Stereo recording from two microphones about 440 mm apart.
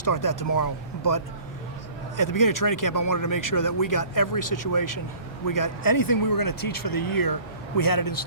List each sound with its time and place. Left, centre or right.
0.0 s speech: left